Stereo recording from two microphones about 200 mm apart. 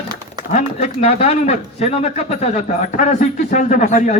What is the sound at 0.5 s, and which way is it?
Speech, 35° left (ahead or behind).